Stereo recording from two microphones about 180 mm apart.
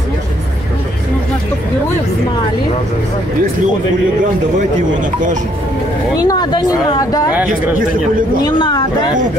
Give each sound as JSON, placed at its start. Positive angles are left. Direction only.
{"t": 6.1, "sound": "speech", "side_deg": 20}
{"t": 7.3, "sound": "speech", "side_deg": -10}
{"t": 8.5, "sound": "speech", "side_deg": 25}